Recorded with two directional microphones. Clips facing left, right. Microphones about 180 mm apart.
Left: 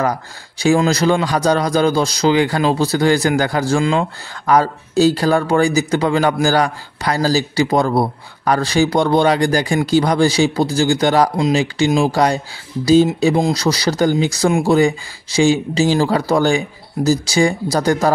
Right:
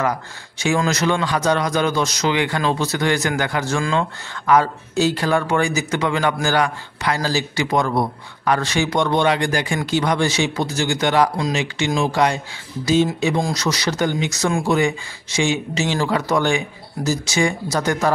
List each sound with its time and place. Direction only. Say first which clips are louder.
0.0 s a man's voice: left 3 dB; 35° left (ahead or behind)
11.3 s a man's voice: left 6 dB; 25° left (ahead or behind)